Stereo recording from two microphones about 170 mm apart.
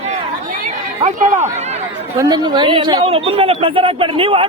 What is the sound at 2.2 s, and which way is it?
Speech, 25° right (ahead or behind).